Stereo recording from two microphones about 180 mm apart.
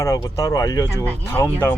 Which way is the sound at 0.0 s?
15° left (ahead or behind).